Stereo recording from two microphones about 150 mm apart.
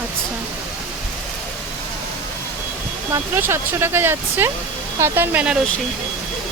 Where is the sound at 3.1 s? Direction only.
15° right (ahead or behind).